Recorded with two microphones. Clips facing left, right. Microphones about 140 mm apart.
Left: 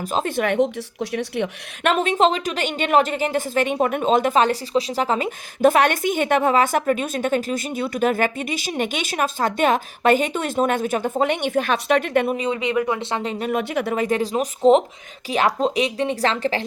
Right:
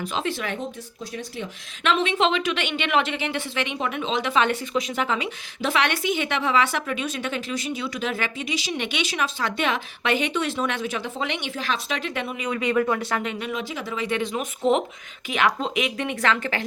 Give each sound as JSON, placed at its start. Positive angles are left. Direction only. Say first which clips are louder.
{"t": 0.0, "sound": "a woman's voice", "louder": "left 5 dB", "side_deg": 45}
{"t": 1.9, "sound": "a woman's voice", "louder": "left 3 dB", "side_deg": 45}
{"t": 12.4, "sound": "speech", "louder": "left 1 dB", "side_deg": 25}
{"t": 13.4, "sound": "speech", "louder": "left 7 dB", "side_deg": 55}